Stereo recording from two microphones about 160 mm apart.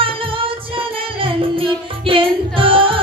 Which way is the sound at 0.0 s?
35° right (ahead or behind).